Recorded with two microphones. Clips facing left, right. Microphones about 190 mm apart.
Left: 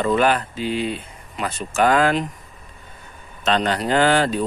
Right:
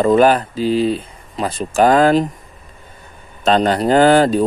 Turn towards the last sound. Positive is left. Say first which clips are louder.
# right 7 dB
turn(degrees=-40)  # may be behind; listen again after turning